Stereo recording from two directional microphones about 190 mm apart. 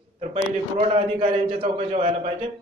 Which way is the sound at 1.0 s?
30° right (ahead or behind).